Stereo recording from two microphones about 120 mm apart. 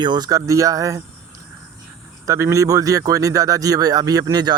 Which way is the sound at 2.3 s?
25° right (ahead or behind).